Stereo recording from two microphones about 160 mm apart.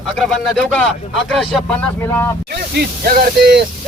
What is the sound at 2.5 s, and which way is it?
Speech, 75° right (ahead or behind).